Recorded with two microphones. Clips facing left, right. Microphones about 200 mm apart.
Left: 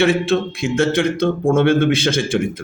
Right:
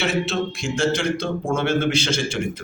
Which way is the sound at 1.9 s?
55° left (ahead or behind).